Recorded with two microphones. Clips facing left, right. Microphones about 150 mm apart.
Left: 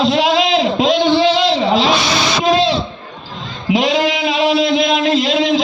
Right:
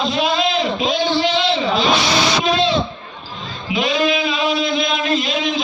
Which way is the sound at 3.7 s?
85° left.